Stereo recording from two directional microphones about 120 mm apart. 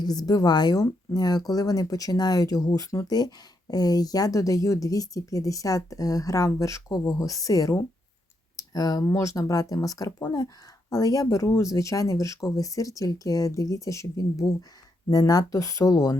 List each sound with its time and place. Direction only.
0.0 s speech: 35° left (ahead or behind)